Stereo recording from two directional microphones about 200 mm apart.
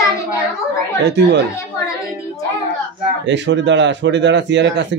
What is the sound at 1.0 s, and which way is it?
Speech, 60° right (ahead or behind).